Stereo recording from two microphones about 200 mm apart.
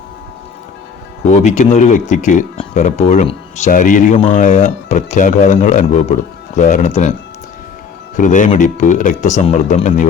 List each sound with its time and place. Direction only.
1.3 s speech: 35° left (ahead or behind)
8.1 s speech: 40° left (ahead or behind)